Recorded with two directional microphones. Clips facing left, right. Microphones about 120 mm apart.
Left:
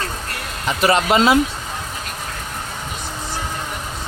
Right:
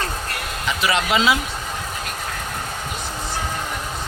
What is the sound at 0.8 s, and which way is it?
Speech, 45° left (ahead or behind).